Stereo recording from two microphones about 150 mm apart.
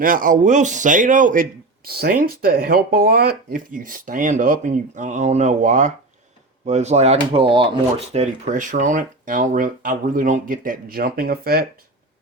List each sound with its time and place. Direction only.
0.0 s a man's voice: 65° right (ahead or behind); by 11.6 s 85° right